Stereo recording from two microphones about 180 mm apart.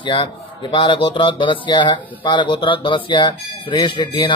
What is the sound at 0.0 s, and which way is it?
Speech, 25° left (ahead or behind).